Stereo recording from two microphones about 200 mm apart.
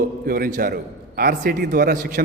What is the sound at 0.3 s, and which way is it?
A man's voice, 45° right (ahead or behind).